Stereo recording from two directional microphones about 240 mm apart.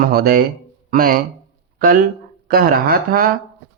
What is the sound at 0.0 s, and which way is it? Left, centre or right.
Speech, right.